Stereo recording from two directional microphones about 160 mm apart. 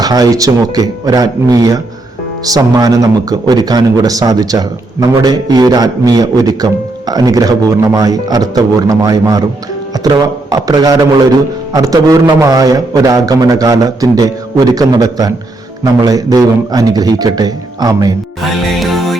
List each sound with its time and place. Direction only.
0.0 s speech: 25° right (ahead or behind)
18.8 s music: centre (ahead or behind)